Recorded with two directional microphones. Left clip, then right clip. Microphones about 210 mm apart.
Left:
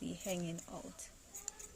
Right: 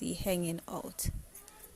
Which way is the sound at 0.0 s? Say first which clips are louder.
Right 8 dB; 30° right (ahead or behind).